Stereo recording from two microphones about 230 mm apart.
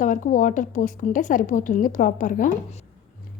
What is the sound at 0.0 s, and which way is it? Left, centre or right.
Speech, left.